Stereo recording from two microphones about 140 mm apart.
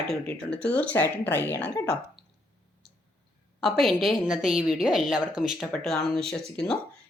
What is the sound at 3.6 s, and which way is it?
Speech, centre (ahead or behind).